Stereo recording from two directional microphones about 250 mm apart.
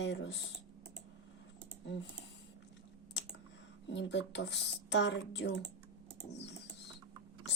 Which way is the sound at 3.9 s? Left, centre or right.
Left.